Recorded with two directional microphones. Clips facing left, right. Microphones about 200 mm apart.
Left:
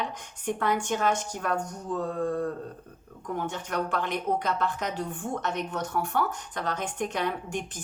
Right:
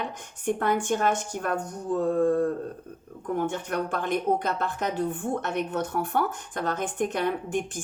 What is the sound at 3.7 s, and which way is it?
Speech, 50° right (ahead or behind).